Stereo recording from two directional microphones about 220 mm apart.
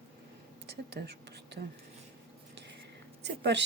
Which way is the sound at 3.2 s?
50° right (ahead or behind).